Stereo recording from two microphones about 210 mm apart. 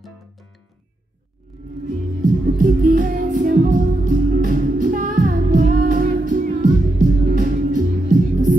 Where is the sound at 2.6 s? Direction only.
40° right (ahead or behind).